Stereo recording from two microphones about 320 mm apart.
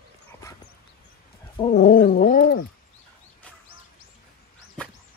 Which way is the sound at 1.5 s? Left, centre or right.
Centre.